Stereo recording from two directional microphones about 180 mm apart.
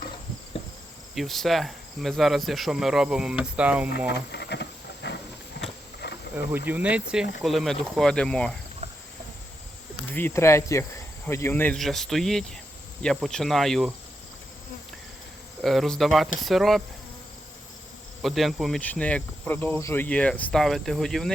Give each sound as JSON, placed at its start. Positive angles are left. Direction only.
{"t": 1.1, "sound": "cricket", "side_deg": 0}
{"t": 4.1, "sound": "speech", "side_deg": 70}
{"t": 5.0, "sound": "a sound", "side_deg": 70}
{"t": 6.7, "sound": "cricket", "side_deg": -10}
{"t": 8.8, "sound": "insect", "side_deg": -35}
{"t": 10.2, "sound": "cricket", "side_deg": 15}
{"t": 15.6, "sound": "cricket", "side_deg": 0}
{"t": 18.2, "sound": "cricket", "side_deg": 0}